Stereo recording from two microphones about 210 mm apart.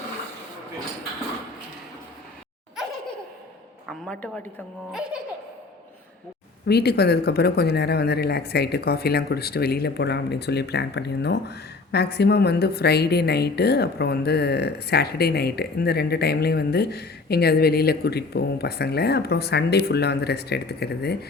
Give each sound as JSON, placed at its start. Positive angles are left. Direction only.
{"t": 3.8, "sound": "a man's voice", "side_deg": 5}
{"t": 6.7, "sound": "speech", "side_deg": 50}